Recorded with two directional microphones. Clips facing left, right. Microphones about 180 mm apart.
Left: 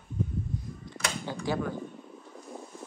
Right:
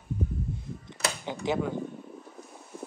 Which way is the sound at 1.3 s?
20° right (ahead or behind).